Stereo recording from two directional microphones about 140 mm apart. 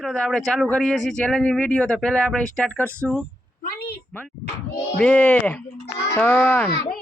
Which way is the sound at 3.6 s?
90° left.